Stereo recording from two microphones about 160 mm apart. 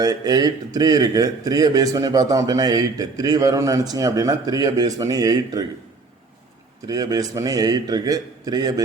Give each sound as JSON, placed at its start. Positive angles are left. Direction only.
{"t": 0.0, "sound": "speech", "side_deg": -25}
{"t": 6.8, "sound": "speech", "side_deg": -25}